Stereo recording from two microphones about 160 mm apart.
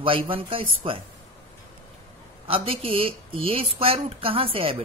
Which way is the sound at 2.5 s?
35° right (ahead or behind).